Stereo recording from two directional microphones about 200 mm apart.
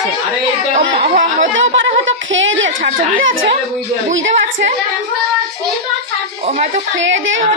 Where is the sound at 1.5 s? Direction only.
70° right (ahead or behind).